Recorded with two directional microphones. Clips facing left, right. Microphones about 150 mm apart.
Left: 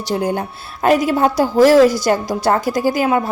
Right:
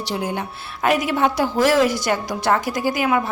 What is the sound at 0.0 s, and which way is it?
A woman's voice, 45° left (ahead or behind).